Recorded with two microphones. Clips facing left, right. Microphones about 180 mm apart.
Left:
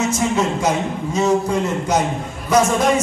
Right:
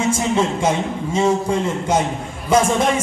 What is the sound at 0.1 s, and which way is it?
A man's voice, 25° right (ahead or behind).